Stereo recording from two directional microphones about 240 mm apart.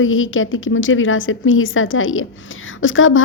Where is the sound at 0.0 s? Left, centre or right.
Left.